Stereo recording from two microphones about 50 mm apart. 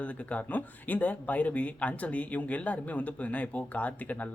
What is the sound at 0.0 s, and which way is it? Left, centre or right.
Speech, left.